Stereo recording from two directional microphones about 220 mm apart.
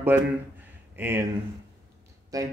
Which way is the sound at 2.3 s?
15° right (ahead or behind).